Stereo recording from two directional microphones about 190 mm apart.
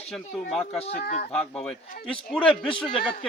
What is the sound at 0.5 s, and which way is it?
Speech, centre (ahead or behind).